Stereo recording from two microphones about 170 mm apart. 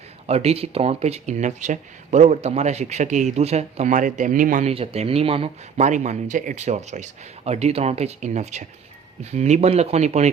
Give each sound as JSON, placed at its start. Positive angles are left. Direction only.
{"t": 0.3, "sound": "speech", "side_deg": -40}
{"t": 4.7, "sound": "speech", "side_deg": -35}